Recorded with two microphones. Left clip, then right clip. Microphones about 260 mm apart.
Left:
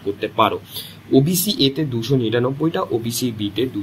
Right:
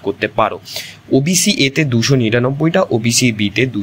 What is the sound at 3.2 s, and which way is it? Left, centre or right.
Speech, right.